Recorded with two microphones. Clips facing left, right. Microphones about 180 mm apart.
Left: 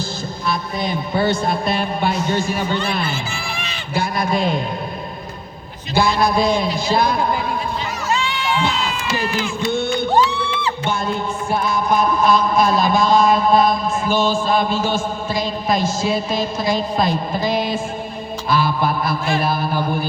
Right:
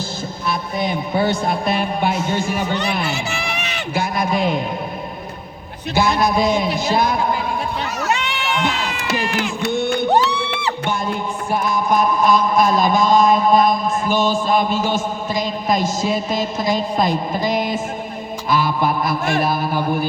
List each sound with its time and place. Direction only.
0.8 s a man's voice: 20° right (ahead or behind)
3.1 s crowd: 75° right (ahead or behind)
3.9 s a man's voice: 20° right (ahead or behind)
5.9 s a man's voice: 20° right (ahead or behind)
8.0 s crowd: 70° right (ahead or behind)
10.1 s music: 70° right (ahead or behind)
11.5 s a man's voice: 15° right (ahead or behind)